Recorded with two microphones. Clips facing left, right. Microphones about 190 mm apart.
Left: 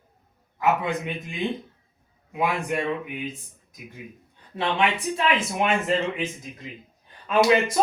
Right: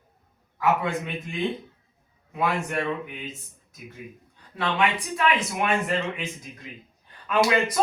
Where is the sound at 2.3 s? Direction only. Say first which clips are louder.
Left 1 dB; 15° left (ahead or behind).